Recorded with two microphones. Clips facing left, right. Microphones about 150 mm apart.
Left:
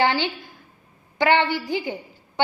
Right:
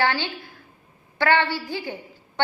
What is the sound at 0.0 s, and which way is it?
A woman's voice, 20° left (ahead or behind).